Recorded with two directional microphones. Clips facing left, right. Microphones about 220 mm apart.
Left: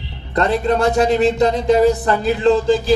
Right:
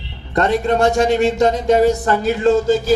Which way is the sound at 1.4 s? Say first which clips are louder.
Even; 45° right (ahead or behind).